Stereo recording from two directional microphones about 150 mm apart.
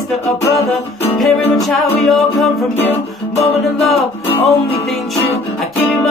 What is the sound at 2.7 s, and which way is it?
Music, 40° left (ahead or behind).